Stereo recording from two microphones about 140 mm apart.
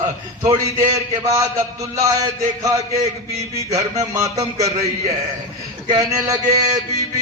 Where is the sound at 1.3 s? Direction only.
20° right (ahead or behind).